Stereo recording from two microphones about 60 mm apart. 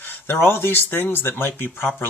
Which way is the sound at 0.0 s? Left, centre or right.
Left.